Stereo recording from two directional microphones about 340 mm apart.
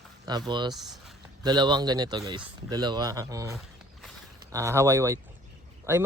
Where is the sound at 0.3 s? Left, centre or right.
Centre.